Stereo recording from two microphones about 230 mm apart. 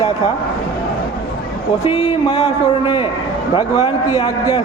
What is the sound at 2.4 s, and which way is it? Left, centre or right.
A man's voice, left.